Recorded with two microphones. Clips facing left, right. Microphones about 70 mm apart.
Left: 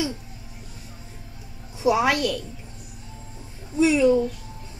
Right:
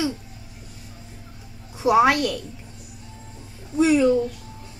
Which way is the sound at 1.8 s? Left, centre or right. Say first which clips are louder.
Right 3 dB; right.